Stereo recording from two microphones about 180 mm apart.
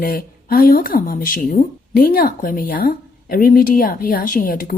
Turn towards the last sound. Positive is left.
turn(degrees=50)  # may be behind; listen again after turning